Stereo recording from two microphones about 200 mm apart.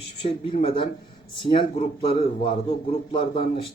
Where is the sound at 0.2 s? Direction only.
30° left (ahead or behind).